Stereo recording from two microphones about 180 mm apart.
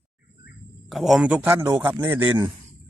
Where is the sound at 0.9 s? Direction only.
Centre (ahead or behind).